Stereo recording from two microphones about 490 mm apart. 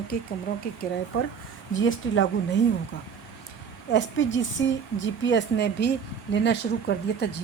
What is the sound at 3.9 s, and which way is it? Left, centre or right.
A woman's voice, left.